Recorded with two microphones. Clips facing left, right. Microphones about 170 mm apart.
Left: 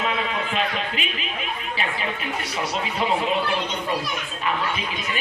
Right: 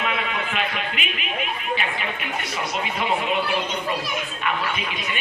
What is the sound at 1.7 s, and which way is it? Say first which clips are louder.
Music: even; 35° left (ahead or behind).